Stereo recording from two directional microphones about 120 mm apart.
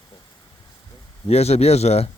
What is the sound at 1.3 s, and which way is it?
Speech, 60° left (ahead or behind).